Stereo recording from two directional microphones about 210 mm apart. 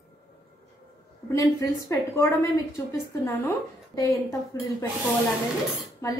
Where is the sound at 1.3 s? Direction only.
15° left (ahead or behind).